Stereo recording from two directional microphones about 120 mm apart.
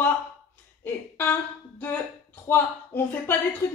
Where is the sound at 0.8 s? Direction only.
15° left (ahead or behind).